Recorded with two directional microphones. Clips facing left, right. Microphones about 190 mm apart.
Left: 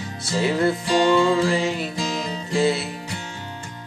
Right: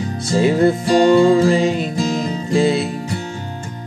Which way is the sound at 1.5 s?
20° right (ahead or behind).